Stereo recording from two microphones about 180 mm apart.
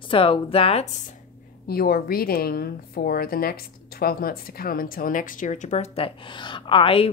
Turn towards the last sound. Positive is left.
turn(degrees=30)  # may be behind; listen again after turning